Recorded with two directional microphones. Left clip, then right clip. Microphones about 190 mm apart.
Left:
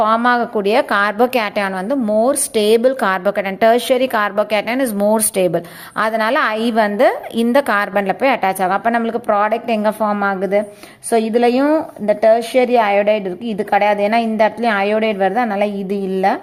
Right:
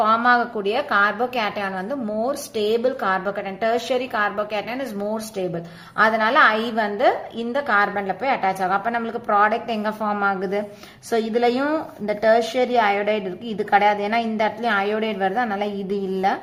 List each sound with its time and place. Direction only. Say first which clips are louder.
0.0 s a woman's voice: left 3 dB; 35° left (ahead or behind)